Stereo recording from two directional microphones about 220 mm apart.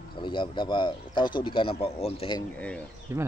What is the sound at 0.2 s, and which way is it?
Speech, 20° left (ahead or behind).